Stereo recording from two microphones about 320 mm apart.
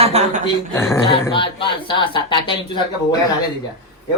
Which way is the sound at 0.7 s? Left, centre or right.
Centre.